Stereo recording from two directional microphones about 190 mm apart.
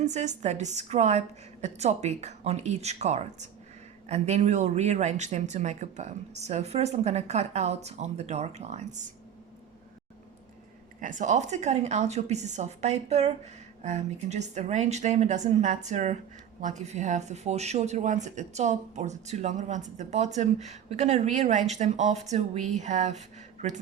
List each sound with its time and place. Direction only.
0.0 s speech: 40° right (ahead or behind)
11.0 s speech: 40° right (ahead or behind)